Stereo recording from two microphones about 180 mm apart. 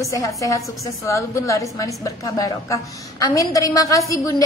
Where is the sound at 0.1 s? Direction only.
20° left (ahead or behind).